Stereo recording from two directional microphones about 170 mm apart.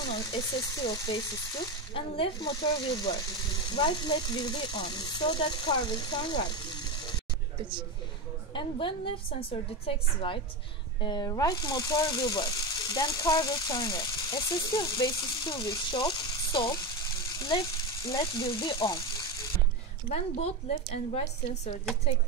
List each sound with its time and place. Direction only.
0.0 s speech: 25° left (ahead or behind)
8.5 s a woman's voice: 30° left (ahead or behind)
20.1 s a woman's voice: 35° left (ahead or behind)